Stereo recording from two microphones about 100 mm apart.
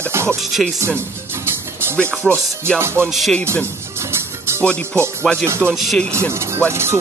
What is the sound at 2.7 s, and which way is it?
Speech, 25° right (ahead or behind).